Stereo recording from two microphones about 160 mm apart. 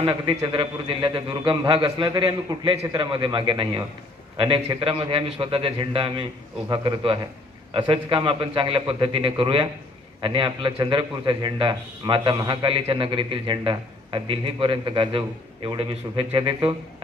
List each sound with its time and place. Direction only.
0.0 s a man's voice: 30° right (ahead or behind)